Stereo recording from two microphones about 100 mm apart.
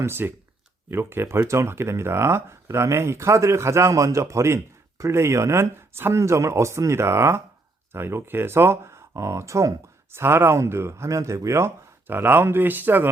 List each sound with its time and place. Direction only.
0.0 s speech: 20° right (ahead or behind)